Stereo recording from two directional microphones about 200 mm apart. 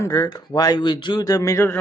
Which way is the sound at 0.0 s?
15° left (ahead or behind).